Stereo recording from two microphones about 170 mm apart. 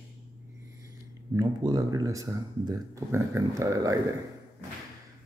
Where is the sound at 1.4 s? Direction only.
20° right (ahead or behind).